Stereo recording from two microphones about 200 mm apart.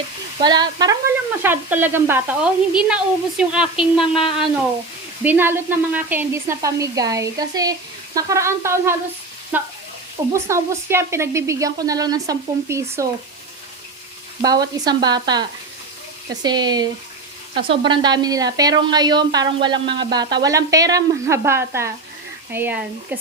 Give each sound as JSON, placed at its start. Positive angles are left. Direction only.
{"t": 0.4, "sound": "speech", "side_deg": -20}
{"t": 1.4, "sound": "speech", "side_deg": -10}
{"t": 5.2, "sound": "speech", "side_deg": -10}
{"t": 14.4, "sound": "speech", "side_deg": -20}